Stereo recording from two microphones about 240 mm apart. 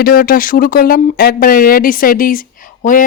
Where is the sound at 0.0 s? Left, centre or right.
Left.